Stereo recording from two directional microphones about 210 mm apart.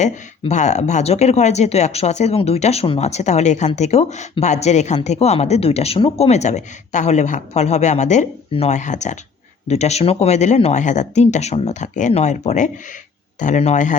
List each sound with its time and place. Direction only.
0.0 s speech: 35° left (ahead or behind)